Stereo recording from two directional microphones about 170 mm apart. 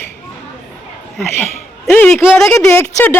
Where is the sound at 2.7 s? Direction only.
15° left (ahead or behind).